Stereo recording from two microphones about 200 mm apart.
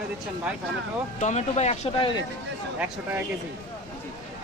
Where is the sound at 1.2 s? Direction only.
35° left (ahead or behind).